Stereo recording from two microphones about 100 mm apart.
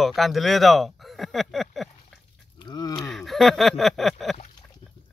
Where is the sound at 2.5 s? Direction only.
45° left (ahead or behind).